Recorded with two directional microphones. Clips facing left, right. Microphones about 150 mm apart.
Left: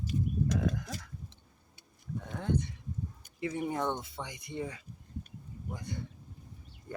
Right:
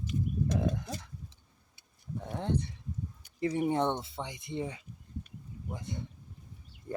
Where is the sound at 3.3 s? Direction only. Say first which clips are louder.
Right 5 dB; 35° right (ahead or behind).